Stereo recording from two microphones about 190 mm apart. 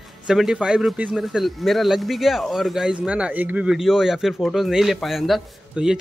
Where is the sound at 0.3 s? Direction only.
Centre (ahead or behind).